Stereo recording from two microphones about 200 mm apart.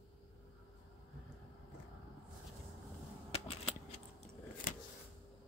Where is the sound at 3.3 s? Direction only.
30° left (ahead or behind).